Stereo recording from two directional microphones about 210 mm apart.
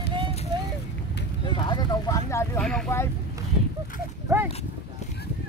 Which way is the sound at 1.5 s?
20° left (ahead or behind).